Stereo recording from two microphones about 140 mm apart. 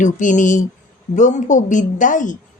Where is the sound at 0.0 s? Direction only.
65° left (ahead or behind).